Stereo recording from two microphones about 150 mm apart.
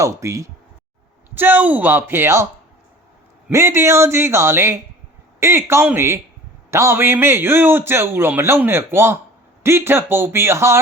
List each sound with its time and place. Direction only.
0.0 s a man's voice: 20° right (ahead or behind)
3.5 s a man's voice: 20° right (ahead or behind)